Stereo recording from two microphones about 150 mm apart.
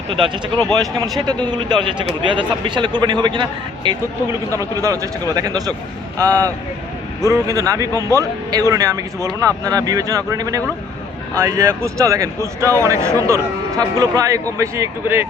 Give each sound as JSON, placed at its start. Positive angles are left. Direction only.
{"t": 0.1, "sound": "speech", "side_deg": -30}
{"t": 4.5, "sound": "speech", "side_deg": -20}